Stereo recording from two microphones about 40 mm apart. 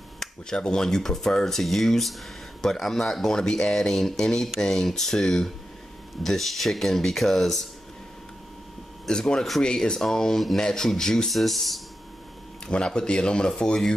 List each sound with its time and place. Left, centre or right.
0.2 s speech: centre
9.1 s speech: centre
11.2 s speech: centre
12.6 s speech: centre